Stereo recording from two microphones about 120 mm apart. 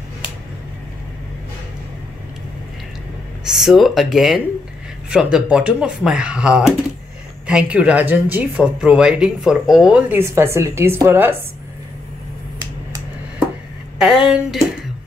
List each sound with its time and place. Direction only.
3.6 s speech: centre (ahead or behind)
10.1 s a woman's voice: 20° right (ahead or behind)
13.9 s speech: 5° right (ahead or behind)